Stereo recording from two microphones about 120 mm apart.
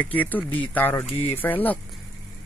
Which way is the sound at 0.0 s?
15° left (ahead or behind).